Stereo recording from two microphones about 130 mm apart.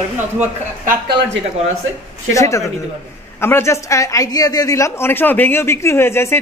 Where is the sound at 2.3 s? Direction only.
25° left (ahead or behind).